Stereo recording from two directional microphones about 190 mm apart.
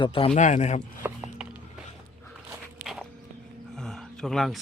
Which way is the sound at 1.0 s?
5° right (ahead or behind).